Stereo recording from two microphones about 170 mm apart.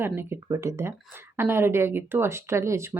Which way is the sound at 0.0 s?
15° right (ahead or behind).